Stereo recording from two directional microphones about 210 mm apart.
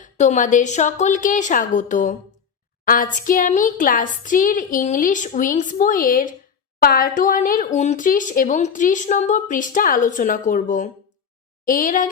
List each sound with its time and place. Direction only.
0.0 s speech: 35° left (ahead or behind)